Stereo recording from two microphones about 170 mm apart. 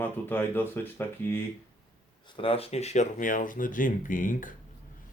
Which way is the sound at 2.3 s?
30° left (ahead or behind).